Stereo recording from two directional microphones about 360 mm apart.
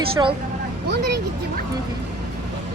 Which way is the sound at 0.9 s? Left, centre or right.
Right.